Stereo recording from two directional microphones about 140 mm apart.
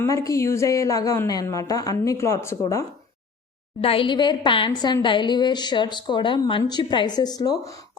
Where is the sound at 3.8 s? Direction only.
40° left (ahead or behind).